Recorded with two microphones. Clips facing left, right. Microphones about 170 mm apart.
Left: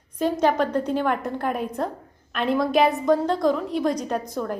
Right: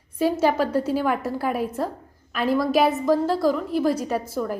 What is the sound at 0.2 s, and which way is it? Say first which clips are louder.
A woman's voice: right 1 dB; 5° right (ahead or behind).